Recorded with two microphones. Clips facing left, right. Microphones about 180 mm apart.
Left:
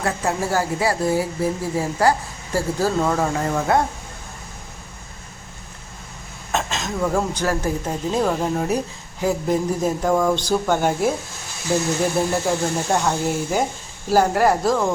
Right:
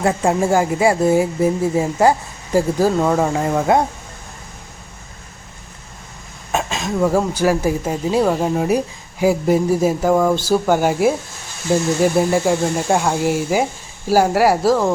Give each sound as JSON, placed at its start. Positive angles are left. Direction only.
{"t": 0.0, "sound": "speech", "side_deg": -25}
{"t": 6.5, "sound": "speech", "side_deg": -10}
{"t": 12.2, "sound": "speech", "side_deg": -10}